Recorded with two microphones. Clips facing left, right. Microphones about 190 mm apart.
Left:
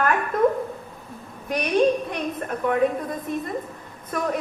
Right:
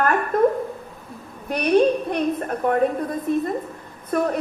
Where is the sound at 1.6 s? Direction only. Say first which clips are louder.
Right 3 dB; 55° right (ahead or behind).